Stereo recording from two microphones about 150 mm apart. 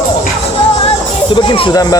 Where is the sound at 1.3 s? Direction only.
30° left (ahead or behind).